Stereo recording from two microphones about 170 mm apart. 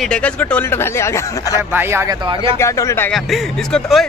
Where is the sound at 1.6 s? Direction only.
15° right (ahead or behind).